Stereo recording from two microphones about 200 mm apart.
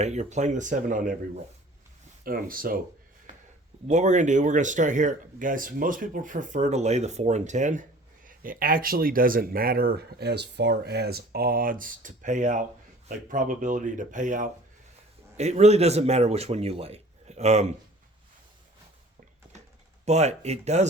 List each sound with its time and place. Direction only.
0.0 s speech: 35° right (ahead or behind)
2.2 s speech: 45° right (ahead or behind)
3.8 s speech: 35° right (ahead or behind)
20.1 s speech: 35° right (ahead or behind)